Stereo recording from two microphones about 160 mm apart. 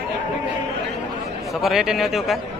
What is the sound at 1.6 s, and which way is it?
Speech, centre (ahead or behind).